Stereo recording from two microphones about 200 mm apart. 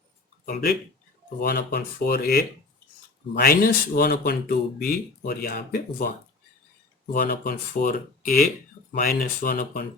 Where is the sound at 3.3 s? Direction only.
50° left (ahead or behind).